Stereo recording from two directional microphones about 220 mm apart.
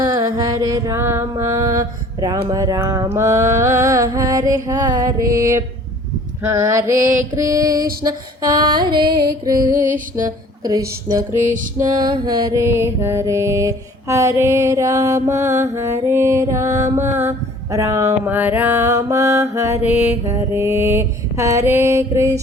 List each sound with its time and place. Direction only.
0.1 s mantra: 15° right (ahead or behind)